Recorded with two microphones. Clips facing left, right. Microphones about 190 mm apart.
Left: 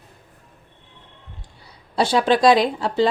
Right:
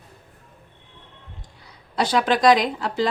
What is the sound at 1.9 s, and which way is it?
Speech, 30° left (ahead or behind).